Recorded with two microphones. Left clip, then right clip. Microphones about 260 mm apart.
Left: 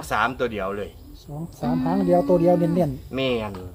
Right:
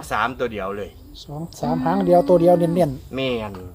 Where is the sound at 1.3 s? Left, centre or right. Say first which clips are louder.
Right 3 dB; right.